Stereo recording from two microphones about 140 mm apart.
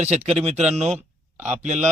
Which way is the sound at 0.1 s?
50° right (ahead or behind).